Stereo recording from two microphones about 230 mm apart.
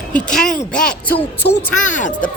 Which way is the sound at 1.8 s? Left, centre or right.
Left.